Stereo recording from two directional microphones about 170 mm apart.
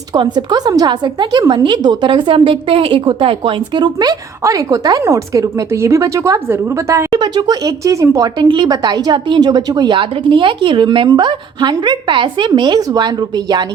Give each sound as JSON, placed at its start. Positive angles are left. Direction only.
{"t": 0.1, "sound": "a woman's voice", "side_deg": -25}